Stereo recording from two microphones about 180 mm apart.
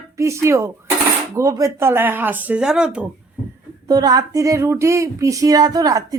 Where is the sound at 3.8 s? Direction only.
20° right (ahead or behind).